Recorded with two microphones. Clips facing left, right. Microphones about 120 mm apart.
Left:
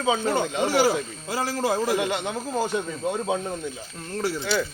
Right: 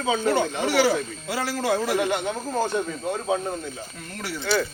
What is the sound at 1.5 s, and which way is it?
Speech, 25° left (ahead or behind).